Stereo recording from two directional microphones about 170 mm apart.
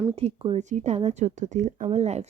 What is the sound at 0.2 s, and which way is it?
Speech, 35° right (ahead or behind).